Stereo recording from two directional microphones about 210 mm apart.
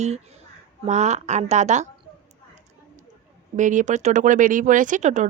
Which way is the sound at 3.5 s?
35° right (ahead or behind).